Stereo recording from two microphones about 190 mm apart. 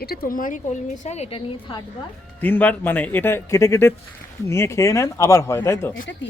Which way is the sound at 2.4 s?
10° left (ahead or behind).